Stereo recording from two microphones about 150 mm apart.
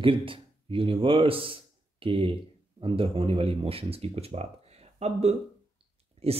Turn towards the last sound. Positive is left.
turn(degrees=-40)  # may be behind; listen again after turning